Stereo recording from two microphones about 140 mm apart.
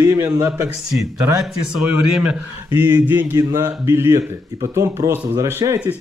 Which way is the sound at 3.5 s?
20° right (ahead or behind).